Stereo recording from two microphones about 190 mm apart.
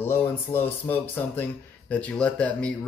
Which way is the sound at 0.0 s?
10° left (ahead or behind).